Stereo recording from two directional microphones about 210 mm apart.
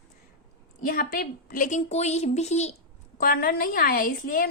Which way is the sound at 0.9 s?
45° left (ahead or behind).